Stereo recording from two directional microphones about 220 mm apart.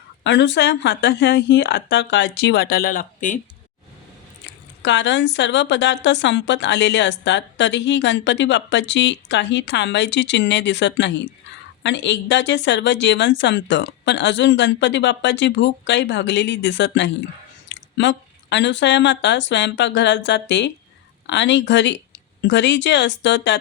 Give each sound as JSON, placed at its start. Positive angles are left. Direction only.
{"t": 0.3, "sound": "a woman's voice", "side_deg": 55}
{"t": 4.8, "sound": "a woman's voice", "side_deg": 55}